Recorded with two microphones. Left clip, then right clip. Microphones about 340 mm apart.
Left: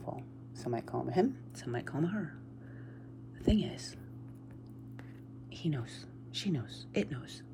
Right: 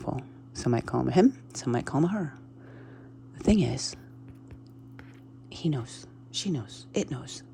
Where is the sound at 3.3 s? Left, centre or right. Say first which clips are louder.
Right 7 dB; centre.